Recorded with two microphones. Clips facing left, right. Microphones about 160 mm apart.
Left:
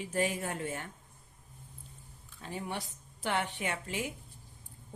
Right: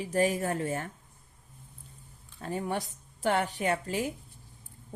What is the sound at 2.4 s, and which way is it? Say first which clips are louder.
A woman's voice: right 6 dB; 45° right (ahead or behind).